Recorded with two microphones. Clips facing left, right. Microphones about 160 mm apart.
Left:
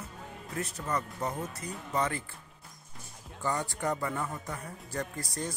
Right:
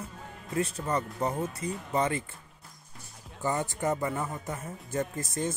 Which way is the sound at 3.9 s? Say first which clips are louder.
Right 2 dB; 20° right (ahead or behind).